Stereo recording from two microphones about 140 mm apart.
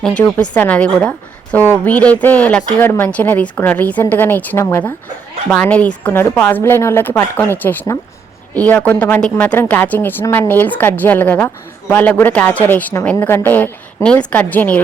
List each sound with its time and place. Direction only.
0.0 s a woman's voice: 5° left (ahead or behind)